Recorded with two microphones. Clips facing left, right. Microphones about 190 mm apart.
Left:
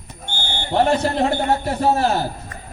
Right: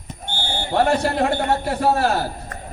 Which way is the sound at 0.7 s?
25° left (ahead or behind).